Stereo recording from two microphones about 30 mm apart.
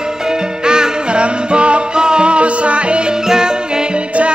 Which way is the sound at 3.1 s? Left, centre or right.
Right.